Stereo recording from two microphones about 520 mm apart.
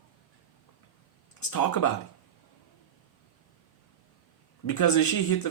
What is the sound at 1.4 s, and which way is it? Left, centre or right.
Speech, left.